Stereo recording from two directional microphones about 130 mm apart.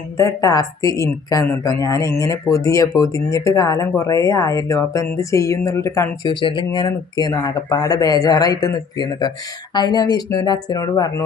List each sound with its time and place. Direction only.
0.2 s speech: 25° left (ahead or behind)
6.3 s speech: 40° left (ahead or behind)